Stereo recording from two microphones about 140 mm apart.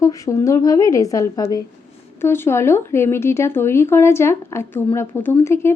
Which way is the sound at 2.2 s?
15° left (ahead or behind).